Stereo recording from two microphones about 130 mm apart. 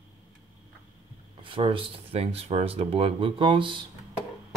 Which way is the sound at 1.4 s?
40° right (ahead or behind).